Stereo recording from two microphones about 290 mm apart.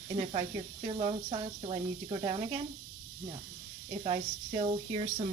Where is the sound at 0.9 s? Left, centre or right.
Centre.